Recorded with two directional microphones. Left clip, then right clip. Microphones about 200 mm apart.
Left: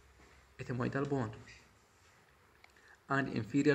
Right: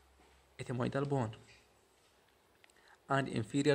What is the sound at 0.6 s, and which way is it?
Speech, 50° right (ahead or behind).